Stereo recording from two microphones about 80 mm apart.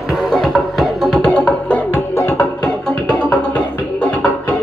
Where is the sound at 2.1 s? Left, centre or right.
Left.